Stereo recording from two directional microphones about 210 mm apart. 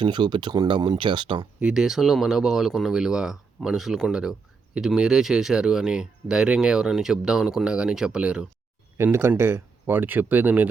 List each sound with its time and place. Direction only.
0.0 s speech: 20° right (ahead or behind)
1.5 s speech: 5° right (ahead or behind)